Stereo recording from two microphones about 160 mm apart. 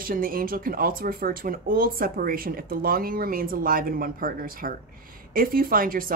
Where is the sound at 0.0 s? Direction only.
65° right (ahead or behind).